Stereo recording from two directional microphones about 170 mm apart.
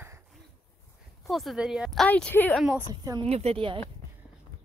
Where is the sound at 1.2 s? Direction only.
Centre (ahead or behind).